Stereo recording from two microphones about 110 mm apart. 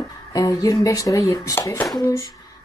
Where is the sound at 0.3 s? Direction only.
35° left (ahead or behind).